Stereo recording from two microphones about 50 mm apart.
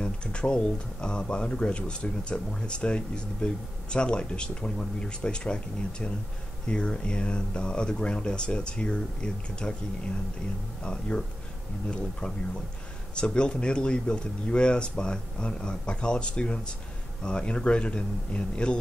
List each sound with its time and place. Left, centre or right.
0.0 s speech: left
13.1 s speech: left